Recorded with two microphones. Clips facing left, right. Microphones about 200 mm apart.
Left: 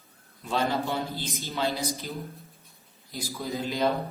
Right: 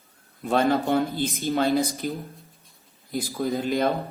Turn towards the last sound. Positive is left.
turn(degrees=-50)  # may be behind; listen again after turning